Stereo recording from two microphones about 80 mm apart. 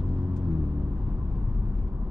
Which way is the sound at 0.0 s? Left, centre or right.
Centre.